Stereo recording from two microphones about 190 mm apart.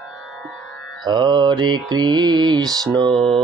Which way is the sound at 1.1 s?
25° right (ahead or behind).